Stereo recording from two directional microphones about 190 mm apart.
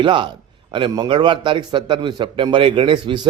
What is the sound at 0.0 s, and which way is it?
A man's voice, 25° right (ahead or behind).